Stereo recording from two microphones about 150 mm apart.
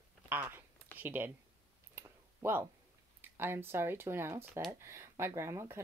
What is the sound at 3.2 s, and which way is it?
Speech, 15° right (ahead or behind).